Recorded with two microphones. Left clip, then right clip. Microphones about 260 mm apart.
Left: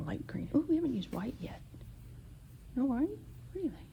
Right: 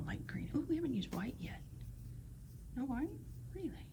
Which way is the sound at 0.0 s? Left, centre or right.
Left.